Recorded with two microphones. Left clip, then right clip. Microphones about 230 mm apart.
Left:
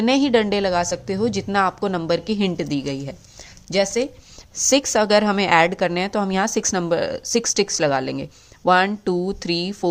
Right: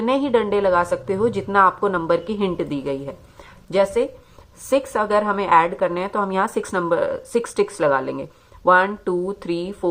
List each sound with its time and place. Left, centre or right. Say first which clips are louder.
0.0 s a woman's voice: left 1 dB; left